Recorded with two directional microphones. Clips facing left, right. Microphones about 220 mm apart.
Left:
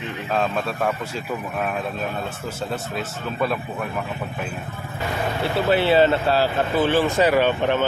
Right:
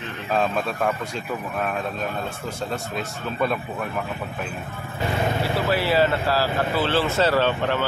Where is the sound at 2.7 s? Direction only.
Centre (ahead or behind).